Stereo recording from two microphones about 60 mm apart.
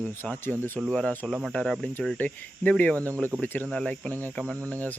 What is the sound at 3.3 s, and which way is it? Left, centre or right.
Speech, right.